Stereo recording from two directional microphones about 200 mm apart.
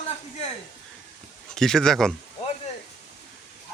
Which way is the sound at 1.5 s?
Centre (ahead or behind).